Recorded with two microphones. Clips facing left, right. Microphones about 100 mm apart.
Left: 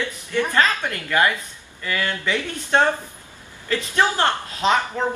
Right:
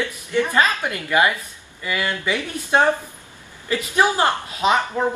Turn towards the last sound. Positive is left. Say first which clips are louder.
# right 1 dB
turn(degrees=-10)  # may be behind; listen again after turning